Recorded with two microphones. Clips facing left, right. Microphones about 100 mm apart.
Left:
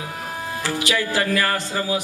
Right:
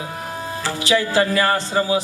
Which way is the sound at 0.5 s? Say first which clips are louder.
Right 4 dB; 25° right (ahead or behind).